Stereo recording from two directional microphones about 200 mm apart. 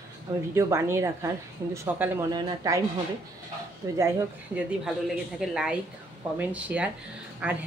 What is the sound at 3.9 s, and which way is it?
A woman's voice, 15° right (ahead or behind).